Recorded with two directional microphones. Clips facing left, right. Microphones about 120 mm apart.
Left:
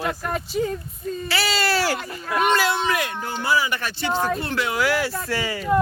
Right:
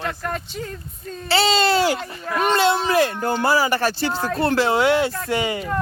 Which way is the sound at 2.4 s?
30° right (ahead or behind).